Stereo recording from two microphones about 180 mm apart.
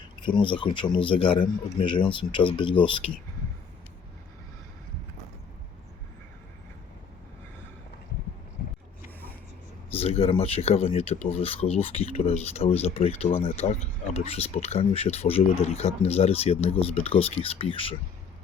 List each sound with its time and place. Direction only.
0.2 s speech: 25° left (ahead or behind)
9.9 s speech: 35° left (ahead or behind)